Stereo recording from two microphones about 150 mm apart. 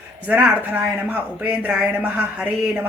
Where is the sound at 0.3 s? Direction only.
10° right (ahead or behind).